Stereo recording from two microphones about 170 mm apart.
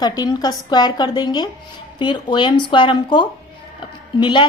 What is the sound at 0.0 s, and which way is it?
A woman's voice, 25° left (ahead or behind).